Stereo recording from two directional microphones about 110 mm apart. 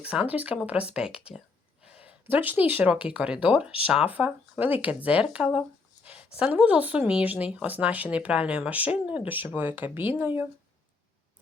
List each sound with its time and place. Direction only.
0.0 s speech: 10° right (ahead or behind)